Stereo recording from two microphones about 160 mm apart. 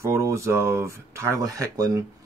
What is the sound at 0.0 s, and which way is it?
Speech, 15° right (ahead or behind).